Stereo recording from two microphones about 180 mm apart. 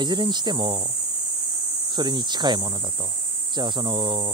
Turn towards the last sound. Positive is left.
turn(degrees=-25)  # may be behind; listen again after turning